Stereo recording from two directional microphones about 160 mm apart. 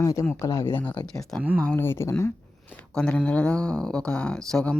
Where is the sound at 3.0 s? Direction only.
5° left (ahead or behind).